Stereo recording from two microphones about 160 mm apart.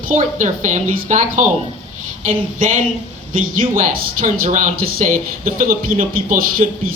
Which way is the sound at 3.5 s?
60° right (ahead or behind).